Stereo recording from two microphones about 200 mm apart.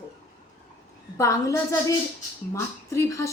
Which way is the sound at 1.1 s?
15° left (ahead or behind).